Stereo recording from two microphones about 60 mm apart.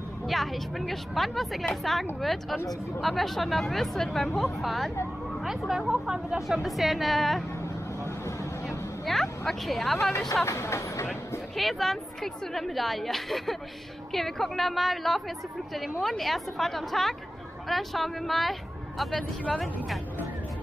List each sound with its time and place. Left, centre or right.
0.3 s a woman's voice: centre
8.6 s vehicle: centre
10.4 s speech: left
11.5 s a woman's voice: centre